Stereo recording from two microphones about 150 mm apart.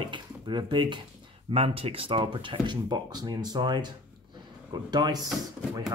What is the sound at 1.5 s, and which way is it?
Speech, 40° right (ahead or behind).